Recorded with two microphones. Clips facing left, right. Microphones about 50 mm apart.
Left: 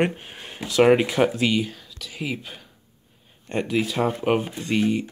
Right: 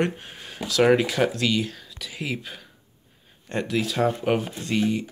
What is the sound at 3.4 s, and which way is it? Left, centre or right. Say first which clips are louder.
Speech: left 2 dB; centre.